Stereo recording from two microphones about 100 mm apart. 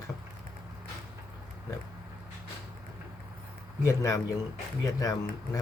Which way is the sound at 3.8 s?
30° left (ahead or behind).